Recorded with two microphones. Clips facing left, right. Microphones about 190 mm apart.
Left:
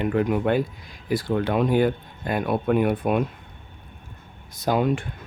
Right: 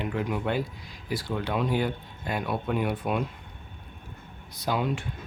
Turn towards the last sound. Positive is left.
turn(degrees=50)  # may be behind; listen again after turning